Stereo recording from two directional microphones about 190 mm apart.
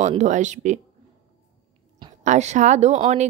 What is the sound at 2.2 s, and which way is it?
A woman's voice, 40° right (ahead or behind).